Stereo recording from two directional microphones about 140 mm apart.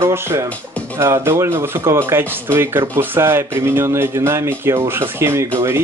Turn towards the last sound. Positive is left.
turn(degrees=-20)  # may be behind; listen again after turning